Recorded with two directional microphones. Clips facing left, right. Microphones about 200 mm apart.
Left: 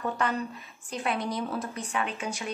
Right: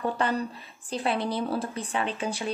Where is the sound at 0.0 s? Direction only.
30° right (ahead or behind).